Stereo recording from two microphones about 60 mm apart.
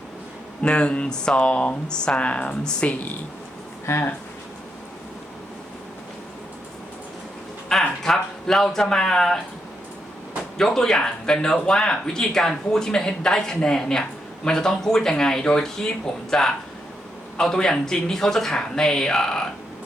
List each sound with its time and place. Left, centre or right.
0.6 s speech: centre
3.8 s speech: left
7.7 s a sound: centre
10.6 s speech: centre